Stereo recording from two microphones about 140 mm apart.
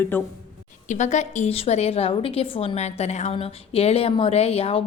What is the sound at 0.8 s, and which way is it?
A woman's voice, 60° left (ahead or behind).